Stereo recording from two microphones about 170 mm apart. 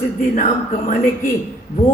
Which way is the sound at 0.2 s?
50° left (ahead or behind).